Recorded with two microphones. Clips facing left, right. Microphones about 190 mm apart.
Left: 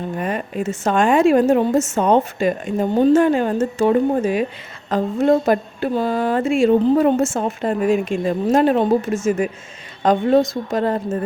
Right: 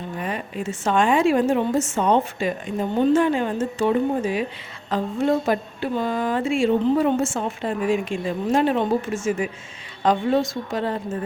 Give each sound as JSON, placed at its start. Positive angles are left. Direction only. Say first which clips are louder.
{"t": 0.2, "sound": "a woman's voice", "louder": "left 4 dB", "side_deg": 50}